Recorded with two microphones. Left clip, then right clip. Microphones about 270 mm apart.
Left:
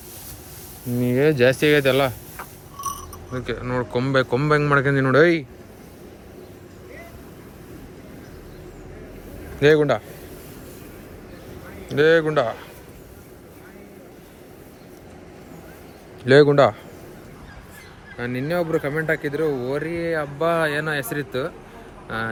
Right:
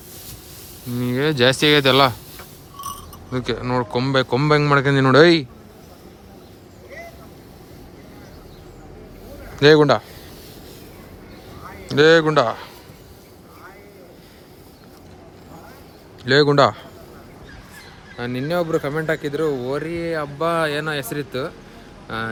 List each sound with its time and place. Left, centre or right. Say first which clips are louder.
0.9 s a man's voice: left 1 dB; centre
3.3 s a man's voice: right 4 dB; centre
9.6 s a man's voice: right 4 dB; centre
11.9 s speech: right 3 dB; centre
16.2 s a man's voice: left 1 dB; centre
18.2 s speech: right 1 dB; centre